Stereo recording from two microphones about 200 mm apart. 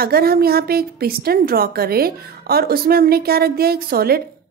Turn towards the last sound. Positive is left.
turn(degrees=-50)  # may be behind; listen again after turning